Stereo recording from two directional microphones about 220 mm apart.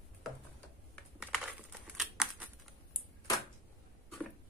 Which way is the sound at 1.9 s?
5° right (ahead or behind).